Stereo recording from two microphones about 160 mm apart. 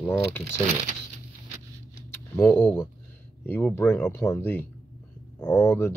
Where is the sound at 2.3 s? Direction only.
15° left (ahead or behind).